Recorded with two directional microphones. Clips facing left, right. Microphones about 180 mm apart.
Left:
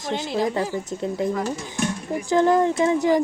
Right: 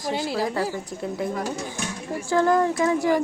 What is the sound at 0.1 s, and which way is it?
Speech, 5° right (ahead or behind).